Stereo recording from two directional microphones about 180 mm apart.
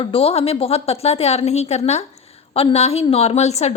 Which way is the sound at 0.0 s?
30° left (ahead or behind).